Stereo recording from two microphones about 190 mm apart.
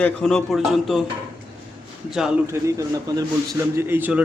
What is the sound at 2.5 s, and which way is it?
Speech, 15° right (ahead or behind).